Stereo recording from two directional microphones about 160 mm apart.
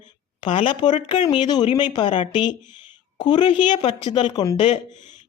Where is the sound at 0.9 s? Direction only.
50° left (ahead or behind).